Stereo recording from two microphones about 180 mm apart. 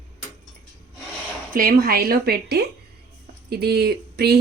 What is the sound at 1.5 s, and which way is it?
Speech, 55° right (ahead or behind).